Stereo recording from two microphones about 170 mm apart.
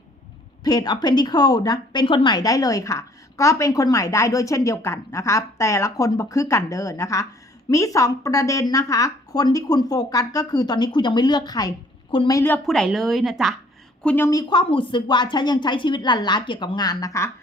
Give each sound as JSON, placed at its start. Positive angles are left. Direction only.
{"t": 0.6, "sound": "a woman's voice", "side_deg": 25}
{"t": 12.6, "sound": "a woman's voice", "side_deg": 0}
{"t": 14.3, "sound": "a woman's voice", "side_deg": 25}